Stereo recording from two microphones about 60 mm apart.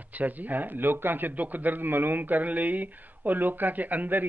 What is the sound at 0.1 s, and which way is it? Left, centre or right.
A man's voice, right.